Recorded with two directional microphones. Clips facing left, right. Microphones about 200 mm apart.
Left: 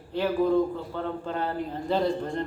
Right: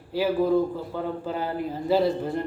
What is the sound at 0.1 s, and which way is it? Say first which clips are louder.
A man's voice: right 1 dB; 5° right (ahead or behind).